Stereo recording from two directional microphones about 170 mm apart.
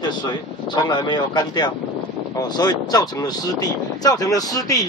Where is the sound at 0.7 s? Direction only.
25° left (ahead or behind).